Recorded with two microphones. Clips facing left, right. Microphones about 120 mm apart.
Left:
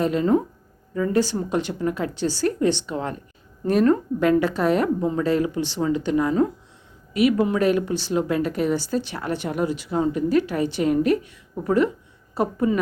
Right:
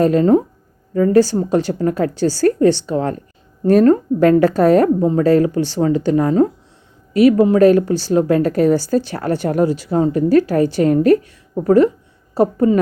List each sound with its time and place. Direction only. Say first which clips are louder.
0.0 s speech: right 7 dB; 45° right (ahead or behind)